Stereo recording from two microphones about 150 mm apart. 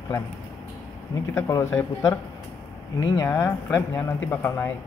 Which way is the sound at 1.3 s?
20° left (ahead or behind).